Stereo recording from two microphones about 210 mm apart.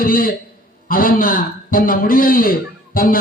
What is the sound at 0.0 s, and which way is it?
A man's voice, 45° left (ahead or behind).